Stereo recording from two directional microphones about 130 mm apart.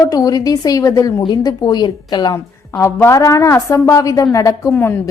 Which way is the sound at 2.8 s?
20° left (ahead or behind).